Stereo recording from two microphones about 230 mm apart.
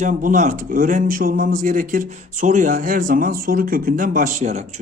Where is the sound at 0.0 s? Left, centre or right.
Right.